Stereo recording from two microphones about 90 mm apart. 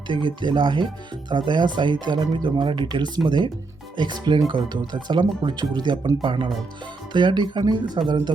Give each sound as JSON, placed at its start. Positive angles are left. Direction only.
{"t": 0.1, "sound": "speech", "side_deg": -60}